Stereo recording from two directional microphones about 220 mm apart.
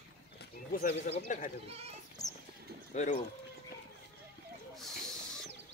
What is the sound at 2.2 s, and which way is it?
Clip-clop, 15° left (ahead or behind).